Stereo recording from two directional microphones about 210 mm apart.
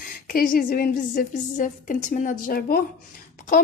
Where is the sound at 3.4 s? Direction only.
40° left (ahead or behind).